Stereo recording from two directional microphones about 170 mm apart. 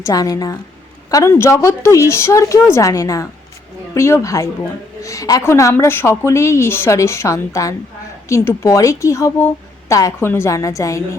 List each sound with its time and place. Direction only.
0.0 s a woman's voice: 20° left (ahead or behind)